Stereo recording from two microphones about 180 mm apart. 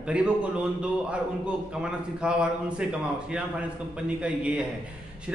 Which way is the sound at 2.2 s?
5° right (ahead or behind).